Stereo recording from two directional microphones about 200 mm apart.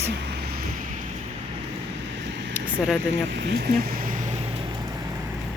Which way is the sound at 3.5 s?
50° right (ahead or behind).